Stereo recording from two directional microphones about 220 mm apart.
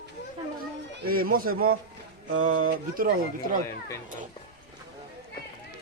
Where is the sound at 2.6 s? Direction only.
40° right (ahead or behind).